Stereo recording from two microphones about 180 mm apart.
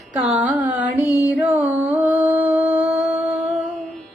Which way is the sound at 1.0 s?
20° left (ahead or behind).